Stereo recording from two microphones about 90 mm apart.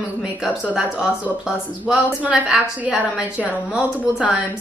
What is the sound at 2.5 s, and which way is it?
A woman's voice, 10° right (ahead or behind).